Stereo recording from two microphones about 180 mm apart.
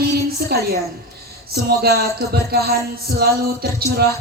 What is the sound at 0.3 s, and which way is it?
A woman's voice, 60° right (ahead or behind).